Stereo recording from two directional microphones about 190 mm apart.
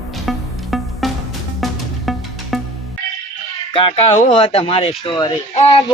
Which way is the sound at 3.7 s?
30° left (ahead or behind).